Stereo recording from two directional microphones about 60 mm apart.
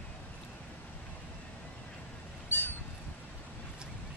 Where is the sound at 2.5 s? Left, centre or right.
Left.